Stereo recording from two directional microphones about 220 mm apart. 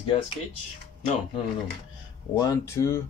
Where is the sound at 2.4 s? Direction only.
15° left (ahead or behind).